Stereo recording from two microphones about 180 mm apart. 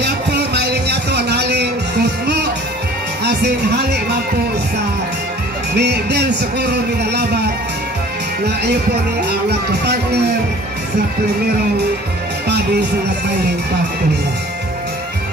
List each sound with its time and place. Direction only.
0.0 s a sound: 65° right (ahead or behind)
3.3 s a man's voice: 65° right (ahead or behind)
5.8 s a man's voice: 65° right (ahead or behind)
9.5 s a man's voice: 65° right (ahead or behind)
12.4 s music: 65° right (ahead or behind)